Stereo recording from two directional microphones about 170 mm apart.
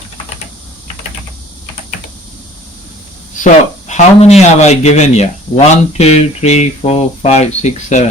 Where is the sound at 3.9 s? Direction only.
40° left (ahead or behind).